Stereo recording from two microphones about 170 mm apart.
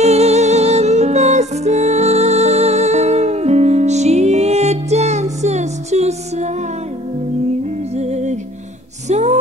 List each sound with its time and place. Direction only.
0.0 s music: 40° right (ahead or behind)
7.9 s music: 40° right (ahead or behind)